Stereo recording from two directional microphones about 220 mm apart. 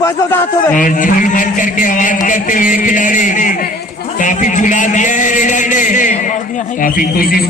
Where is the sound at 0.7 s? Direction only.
35° left (ahead or behind).